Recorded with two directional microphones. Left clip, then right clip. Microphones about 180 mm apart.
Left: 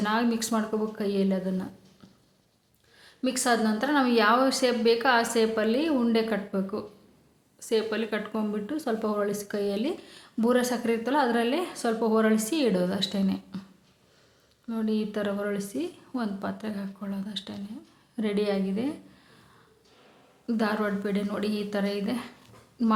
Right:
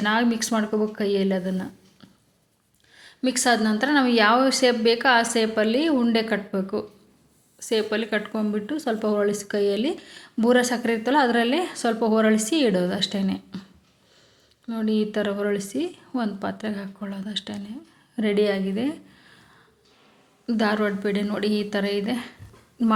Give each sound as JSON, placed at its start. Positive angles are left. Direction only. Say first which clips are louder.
{"t": 0.0, "sound": "speech", "louder": "right 4 dB", "side_deg": -20}
{"t": 14.7, "sound": "a woman's voice", "louder": "right 5 dB", "side_deg": -25}
{"t": 20.5, "sound": "speech", "louder": "right 5 dB", "side_deg": -25}